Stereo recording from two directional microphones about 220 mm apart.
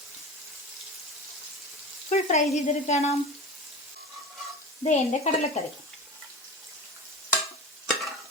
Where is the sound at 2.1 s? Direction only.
30° left (ahead or behind).